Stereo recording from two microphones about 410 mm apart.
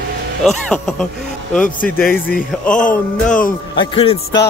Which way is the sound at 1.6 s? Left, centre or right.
Left.